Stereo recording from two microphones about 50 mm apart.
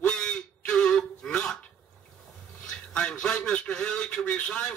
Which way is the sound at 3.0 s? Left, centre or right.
Centre.